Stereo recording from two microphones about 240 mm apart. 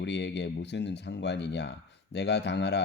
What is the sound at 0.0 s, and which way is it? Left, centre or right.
A man's voice, left.